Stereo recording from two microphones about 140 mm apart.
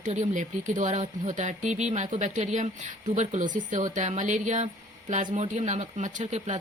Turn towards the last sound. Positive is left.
turn(degrees=-55)  # may be behind; listen again after turning